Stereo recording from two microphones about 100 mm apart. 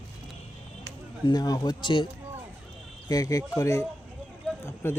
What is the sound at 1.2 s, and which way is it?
Speech, 40° left (ahead or behind).